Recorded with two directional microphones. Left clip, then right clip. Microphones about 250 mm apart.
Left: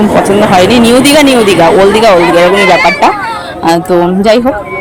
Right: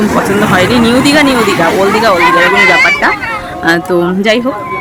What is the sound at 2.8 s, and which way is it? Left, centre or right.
A woman's voice, centre.